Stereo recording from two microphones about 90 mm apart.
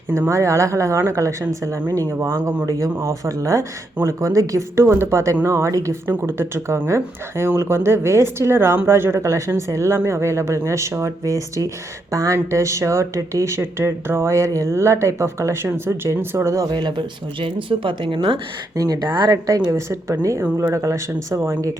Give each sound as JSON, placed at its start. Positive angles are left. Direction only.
{"t": 0.1, "sound": "speech", "side_deg": -35}
{"t": 16.6, "sound": "speech", "side_deg": -55}
{"t": 18.8, "sound": "speech", "side_deg": -50}
{"t": 19.7, "sound": "speech", "side_deg": -35}